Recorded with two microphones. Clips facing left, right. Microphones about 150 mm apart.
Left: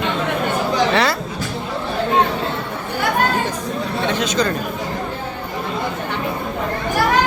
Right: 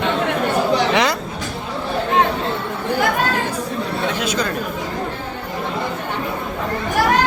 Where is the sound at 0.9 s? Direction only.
15° right (ahead or behind).